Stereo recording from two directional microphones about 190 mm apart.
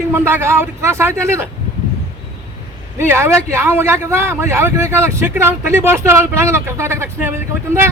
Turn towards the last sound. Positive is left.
turn(degrees=-15)  # may be behind; listen again after turning